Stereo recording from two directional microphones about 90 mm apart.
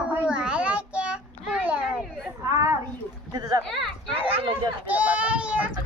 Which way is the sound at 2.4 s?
40° right (ahead or behind).